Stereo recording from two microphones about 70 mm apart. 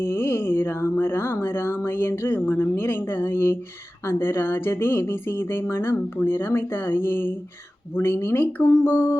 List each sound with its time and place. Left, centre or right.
0.0 s speech: left